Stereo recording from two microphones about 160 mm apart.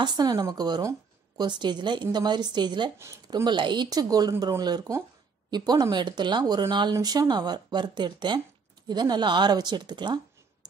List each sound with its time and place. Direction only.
0.0 s speech: 25° right (ahead or behind)